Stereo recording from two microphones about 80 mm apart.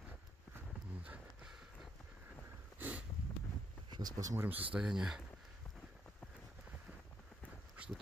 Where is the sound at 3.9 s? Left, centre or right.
Right.